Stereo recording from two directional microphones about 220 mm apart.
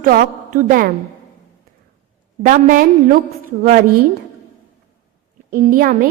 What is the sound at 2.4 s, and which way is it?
Speech, 35° right (ahead or behind).